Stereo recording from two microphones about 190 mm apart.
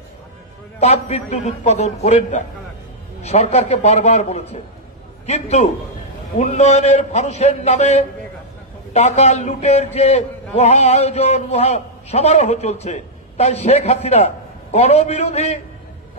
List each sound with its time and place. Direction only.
0.7 s a man's voice: 35° left (ahead or behind)